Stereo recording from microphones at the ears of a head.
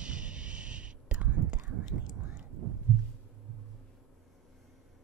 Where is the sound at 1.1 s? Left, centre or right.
Right.